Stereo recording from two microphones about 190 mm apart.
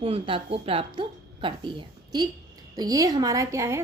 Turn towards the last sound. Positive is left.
turn(degrees=-15)  # may be behind; listen again after turning